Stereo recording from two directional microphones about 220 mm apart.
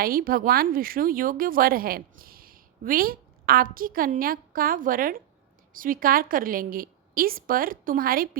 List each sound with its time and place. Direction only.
0.0 s speech: 40° right (ahead or behind)